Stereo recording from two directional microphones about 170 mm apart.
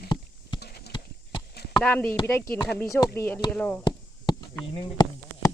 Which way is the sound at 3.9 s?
25° left (ahead or behind).